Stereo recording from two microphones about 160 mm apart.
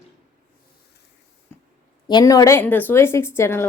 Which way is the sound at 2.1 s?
25° left (ahead or behind).